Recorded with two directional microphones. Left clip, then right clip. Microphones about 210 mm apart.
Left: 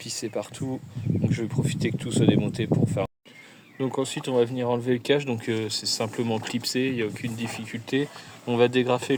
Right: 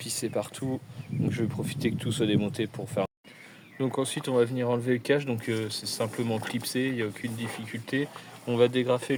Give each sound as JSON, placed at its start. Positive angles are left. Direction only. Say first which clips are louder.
{"t": 0.0, "sound": "speech", "louder": "even", "side_deg": -5}